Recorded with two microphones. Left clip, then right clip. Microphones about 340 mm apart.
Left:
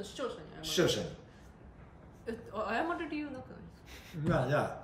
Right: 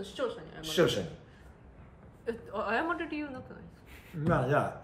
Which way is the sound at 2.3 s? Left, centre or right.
Centre.